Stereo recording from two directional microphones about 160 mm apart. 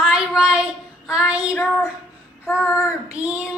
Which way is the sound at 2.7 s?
20° left (ahead or behind).